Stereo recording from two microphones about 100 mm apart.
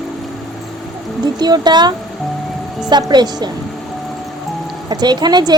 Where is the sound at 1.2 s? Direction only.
45° right (ahead or behind).